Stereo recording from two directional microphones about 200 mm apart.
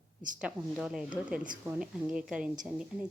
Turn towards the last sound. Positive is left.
turn(degrees=-5)  # may be behind; listen again after turning